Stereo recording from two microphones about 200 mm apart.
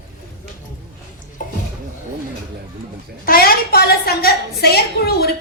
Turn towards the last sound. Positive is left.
turn(degrees=50)  # may be behind; listen again after turning